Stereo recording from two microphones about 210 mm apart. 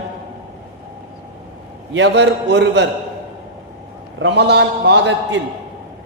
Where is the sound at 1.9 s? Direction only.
55° right (ahead or behind).